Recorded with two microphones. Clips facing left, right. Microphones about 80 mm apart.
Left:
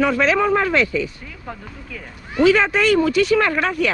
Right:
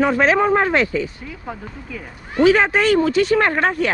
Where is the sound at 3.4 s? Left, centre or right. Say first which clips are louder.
Right 1 dB; right.